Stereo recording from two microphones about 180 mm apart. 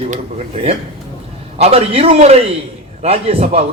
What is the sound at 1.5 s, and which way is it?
A man's voice, 35° right (ahead or behind).